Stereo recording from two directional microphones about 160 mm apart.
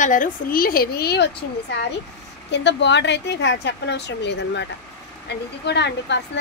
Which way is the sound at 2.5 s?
90° left.